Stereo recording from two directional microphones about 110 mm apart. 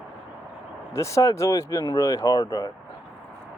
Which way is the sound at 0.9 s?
30° left (ahead or behind).